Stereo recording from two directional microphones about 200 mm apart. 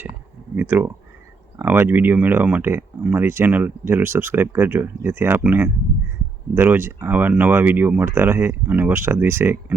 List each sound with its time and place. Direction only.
0.5 s speech: 10° right (ahead or behind)